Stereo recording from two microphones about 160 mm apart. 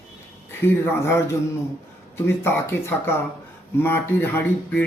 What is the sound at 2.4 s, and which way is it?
Speech, 15° left (ahead or behind).